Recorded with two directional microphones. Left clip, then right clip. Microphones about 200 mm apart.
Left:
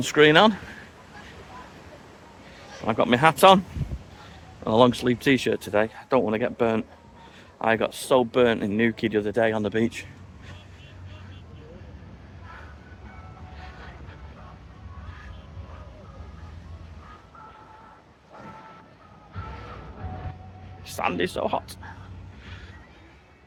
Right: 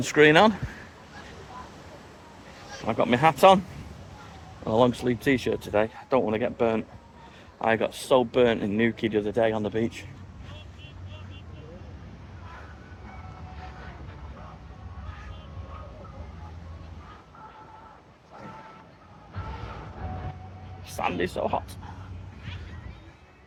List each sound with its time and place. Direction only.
0.0 s speech: 15° left (ahead or behind)
2.8 s speech: 30° left (ahead or behind)
4.6 s speech: 35° left (ahead or behind)
20.8 s a sound: 25° left (ahead or behind)